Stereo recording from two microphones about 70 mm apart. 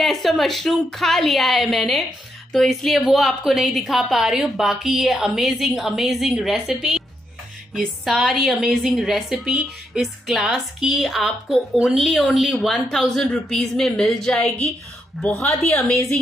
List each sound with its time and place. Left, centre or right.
0.0 s a woman's voice: centre
6.7 s a woman's voice: centre
7.7 s a woman's voice: centre